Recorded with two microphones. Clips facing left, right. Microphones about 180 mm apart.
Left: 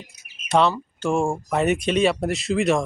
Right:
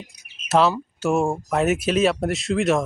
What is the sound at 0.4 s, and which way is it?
Speech, 5° right (ahead or behind).